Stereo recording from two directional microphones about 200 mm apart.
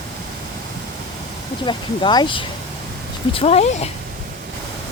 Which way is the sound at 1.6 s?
20° left (ahead or behind).